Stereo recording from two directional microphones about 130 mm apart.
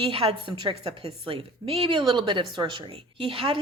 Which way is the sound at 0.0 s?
45° right (ahead or behind).